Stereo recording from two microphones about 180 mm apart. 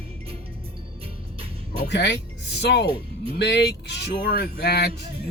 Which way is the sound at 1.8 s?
70° left (ahead or behind).